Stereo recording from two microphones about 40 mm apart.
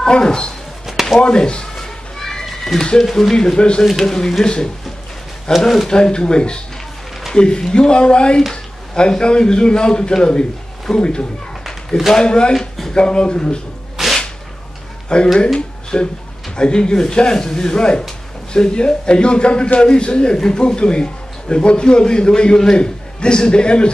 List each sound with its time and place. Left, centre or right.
0.0 s speech: centre
1.2 s children playing: left; by 2.8 s centre
3.0 s speech: centre
5.5 s a man's voice: centre
12.5 s a sound: centre
12.9 s a man's voice: left
14.0 s whip: centre
15.1 s a man's voice: left